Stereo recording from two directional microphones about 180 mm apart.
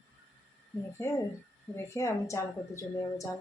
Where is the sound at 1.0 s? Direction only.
15° left (ahead or behind).